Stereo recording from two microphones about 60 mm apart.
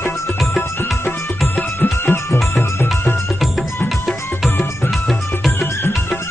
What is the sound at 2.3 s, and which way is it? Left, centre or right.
Music, left.